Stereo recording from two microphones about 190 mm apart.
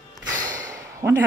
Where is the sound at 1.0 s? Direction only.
20° right (ahead or behind).